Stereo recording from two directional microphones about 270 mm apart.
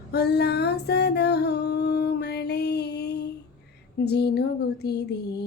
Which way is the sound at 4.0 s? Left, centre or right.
Left.